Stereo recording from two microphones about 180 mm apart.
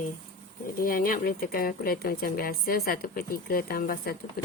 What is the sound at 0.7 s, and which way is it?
Speech, 50° left (ahead or behind).